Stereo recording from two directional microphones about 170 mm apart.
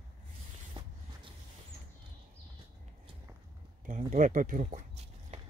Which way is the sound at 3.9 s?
45° right (ahead or behind).